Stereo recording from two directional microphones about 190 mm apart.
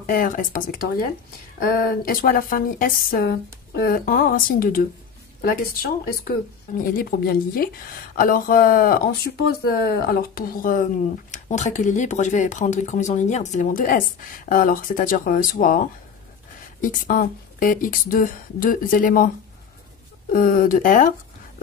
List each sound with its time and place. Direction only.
0.1 s a woman's voice: 45° left (ahead or behind)
16.8 s a woman's voice: 45° left (ahead or behind)